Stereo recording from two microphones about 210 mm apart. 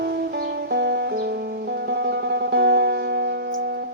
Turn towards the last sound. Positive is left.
turn(degrees=-50)  # may be behind; listen again after turning